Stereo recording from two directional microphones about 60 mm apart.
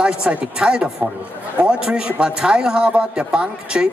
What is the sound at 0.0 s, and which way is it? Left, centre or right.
A man's voice, centre.